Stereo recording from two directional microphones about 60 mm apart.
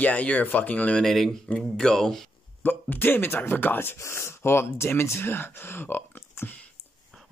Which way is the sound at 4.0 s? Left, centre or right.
Left.